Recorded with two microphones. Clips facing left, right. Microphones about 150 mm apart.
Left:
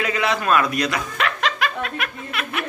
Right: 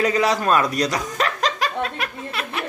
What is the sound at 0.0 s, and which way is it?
Snicker, 35° right (ahead or behind).